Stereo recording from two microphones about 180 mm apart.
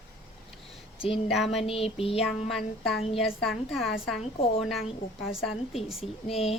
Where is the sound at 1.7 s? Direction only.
30° left (ahead or behind).